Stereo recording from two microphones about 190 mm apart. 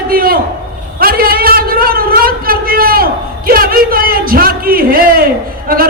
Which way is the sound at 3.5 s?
50° right (ahead or behind).